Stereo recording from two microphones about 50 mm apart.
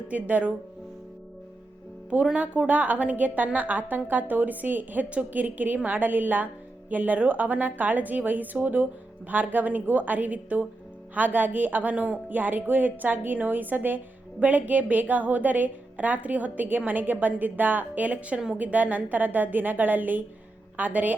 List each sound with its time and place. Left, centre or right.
0.1 s speech: right
2.4 s speech: right